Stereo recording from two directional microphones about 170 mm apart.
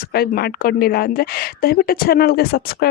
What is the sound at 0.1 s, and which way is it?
A woman's voice, 65° left (ahead or behind).